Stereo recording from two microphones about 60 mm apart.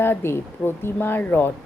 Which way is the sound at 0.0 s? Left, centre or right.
Left.